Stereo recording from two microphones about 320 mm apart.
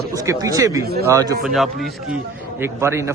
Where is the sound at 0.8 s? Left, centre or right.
Right.